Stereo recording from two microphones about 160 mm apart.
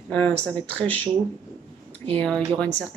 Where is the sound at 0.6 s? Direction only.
10° left (ahead or behind).